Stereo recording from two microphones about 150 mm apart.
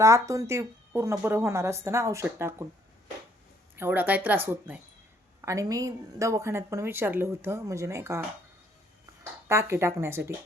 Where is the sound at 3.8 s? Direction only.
15° right (ahead or behind).